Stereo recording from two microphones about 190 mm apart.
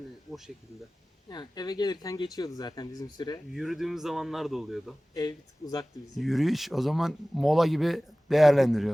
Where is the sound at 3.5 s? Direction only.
Centre (ahead or behind).